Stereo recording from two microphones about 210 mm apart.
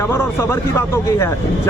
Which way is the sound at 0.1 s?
10° left (ahead or behind).